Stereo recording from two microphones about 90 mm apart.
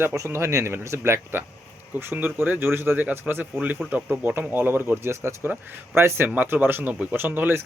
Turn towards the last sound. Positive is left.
turn(degrees=-20)  # may be behind; listen again after turning